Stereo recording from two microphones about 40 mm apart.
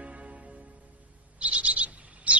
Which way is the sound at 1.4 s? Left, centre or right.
Right.